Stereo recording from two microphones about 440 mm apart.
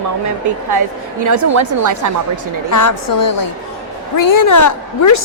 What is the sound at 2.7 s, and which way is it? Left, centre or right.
A woman's voice, left.